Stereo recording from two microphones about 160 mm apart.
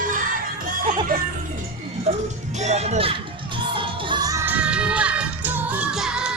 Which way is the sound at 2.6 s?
45° right (ahead or behind).